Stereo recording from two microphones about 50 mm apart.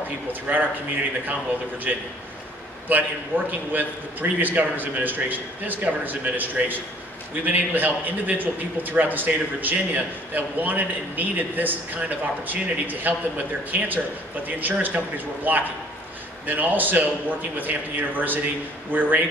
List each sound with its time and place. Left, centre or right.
0.3 s a man's voice: right
1.9 s a man's voice: right